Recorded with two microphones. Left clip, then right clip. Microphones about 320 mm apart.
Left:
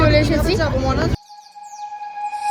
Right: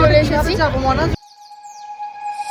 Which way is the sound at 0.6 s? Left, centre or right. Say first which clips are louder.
Right 3 dB; centre.